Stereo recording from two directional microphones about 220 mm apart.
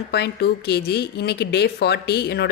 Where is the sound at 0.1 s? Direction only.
45° left (ahead or behind).